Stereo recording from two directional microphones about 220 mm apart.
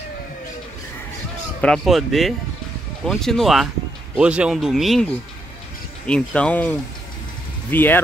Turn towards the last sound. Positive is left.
turn(degrees=10)  # may be behind; listen again after turning